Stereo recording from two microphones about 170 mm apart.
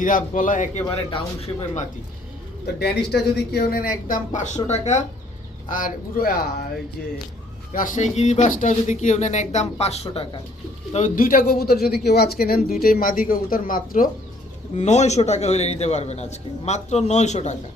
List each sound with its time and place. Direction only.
0.0 s speech: 50° left (ahead or behind)
0.9 s a man's voice: 30° left (ahead or behind)
2.7 s speech: 70° left (ahead or behind); by 5.0 s 40° left (ahead or behind)
5.6 s speech: 55° left (ahead or behind)
7.7 s speech: 50° left (ahead or behind)
10.9 s speech: 50° left (ahead or behind)
14.8 s a man's voice: 40° left (ahead or behind)